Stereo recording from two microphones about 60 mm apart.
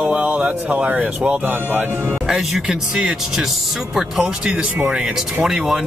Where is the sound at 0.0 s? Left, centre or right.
Right.